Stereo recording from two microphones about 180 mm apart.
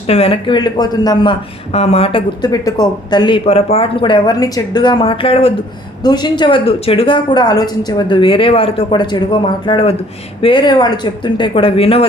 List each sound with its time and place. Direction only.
0.1 s speech: 35° left (ahead or behind)